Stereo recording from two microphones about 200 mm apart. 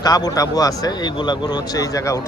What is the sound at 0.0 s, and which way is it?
Speech, 20° left (ahead or behind).